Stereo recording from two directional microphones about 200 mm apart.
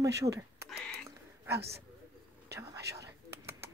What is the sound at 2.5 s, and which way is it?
Whispering, 15° right (ahead or behind).